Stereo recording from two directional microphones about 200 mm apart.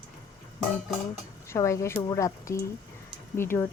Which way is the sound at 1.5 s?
15° left (ahead or behind).